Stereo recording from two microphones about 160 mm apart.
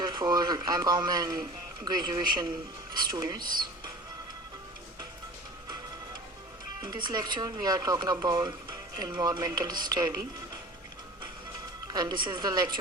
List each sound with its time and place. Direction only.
0.0 s a man's voice: 25° right (ahead or behind)
6.8 s speech: 25° right (ahead or behind)
11.9 s speech: 25° right (ahead or behind)